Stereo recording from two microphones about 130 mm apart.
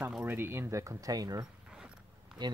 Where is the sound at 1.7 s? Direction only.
5° right (ahead or behind).